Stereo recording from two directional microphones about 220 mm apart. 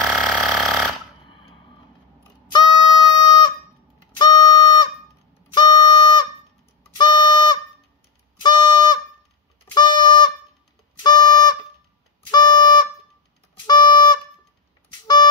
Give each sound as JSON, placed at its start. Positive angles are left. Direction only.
{"t": 0.0, "sound": "burping", "side_deg": 0}
{"t": 2.5, "sound": "music", "side_deg": 20}